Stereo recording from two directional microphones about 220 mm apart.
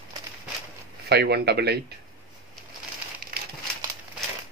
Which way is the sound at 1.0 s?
50° right (ahead or behind).